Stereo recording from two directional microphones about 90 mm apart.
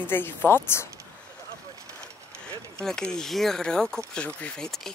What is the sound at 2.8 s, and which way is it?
Speech, 5° left (ahead or behind).